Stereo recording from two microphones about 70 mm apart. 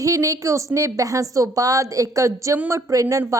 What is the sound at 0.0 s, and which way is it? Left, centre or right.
A woman's voice, right.